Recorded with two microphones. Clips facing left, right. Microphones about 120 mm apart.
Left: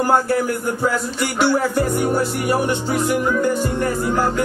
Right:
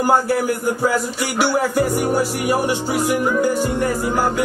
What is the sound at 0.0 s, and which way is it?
Speech, 5° right (ahead or behind).